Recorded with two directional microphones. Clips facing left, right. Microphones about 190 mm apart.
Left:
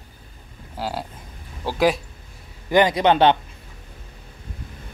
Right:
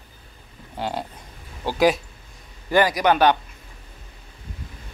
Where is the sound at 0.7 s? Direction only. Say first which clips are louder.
Even; 5° left (ahead or behind).